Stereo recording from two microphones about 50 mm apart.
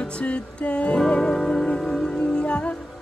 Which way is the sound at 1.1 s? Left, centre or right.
Centre.